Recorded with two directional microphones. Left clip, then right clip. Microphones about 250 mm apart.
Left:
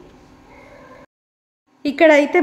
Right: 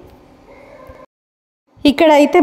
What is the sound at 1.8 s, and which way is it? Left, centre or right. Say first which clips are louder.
Speech: right 3 dB; right.